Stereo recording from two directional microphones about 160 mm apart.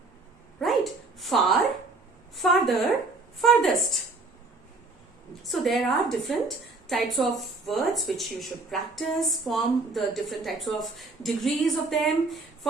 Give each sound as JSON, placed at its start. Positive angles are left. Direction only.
{"t": 1.2, "sound": "a woman's voice", "side_deg": 0}
{"t": 5.4, "sound": "a woman's voice", "side_deg": 0}